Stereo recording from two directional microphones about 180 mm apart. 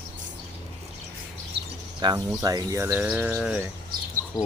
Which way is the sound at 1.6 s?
70° right (ahead or behind).